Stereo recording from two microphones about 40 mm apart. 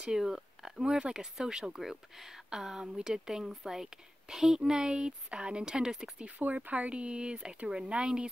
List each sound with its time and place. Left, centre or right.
0.2 s speech: centre
1.8 s speech: centre; by 5.9 s right
5.9 s speech: centre
6.3 s speech: right